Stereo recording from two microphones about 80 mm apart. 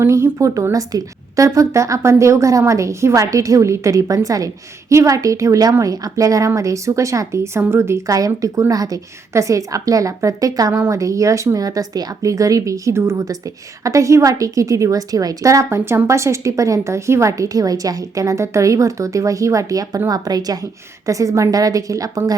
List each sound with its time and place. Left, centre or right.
0.0 s a woman's voice: right